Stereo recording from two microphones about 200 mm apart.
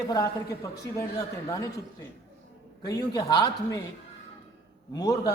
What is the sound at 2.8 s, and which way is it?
Speech, 20° left (ahead or behind).